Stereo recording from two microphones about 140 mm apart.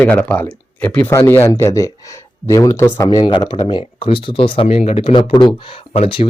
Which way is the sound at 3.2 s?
35° left (ahead or behind).